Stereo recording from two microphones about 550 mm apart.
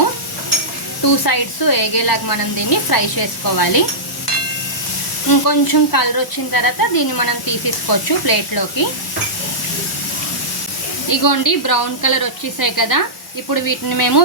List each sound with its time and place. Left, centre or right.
1.0 s speech: left
5.5 s speech: left
11.1 s speech: left